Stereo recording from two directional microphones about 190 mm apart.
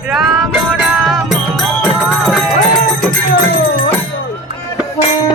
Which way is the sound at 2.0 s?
5° right (ahead or behind).